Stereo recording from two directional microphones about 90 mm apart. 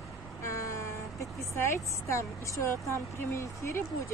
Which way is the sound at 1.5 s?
30° left (ahead or behind).